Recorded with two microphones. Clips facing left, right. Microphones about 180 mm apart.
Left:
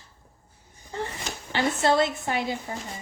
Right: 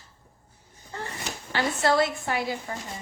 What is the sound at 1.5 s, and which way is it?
A child's voice, 25° left (ahead or behind).